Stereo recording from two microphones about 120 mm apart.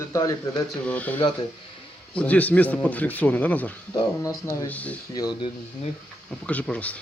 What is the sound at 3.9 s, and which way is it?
Speech, 30° left (ahead or behind).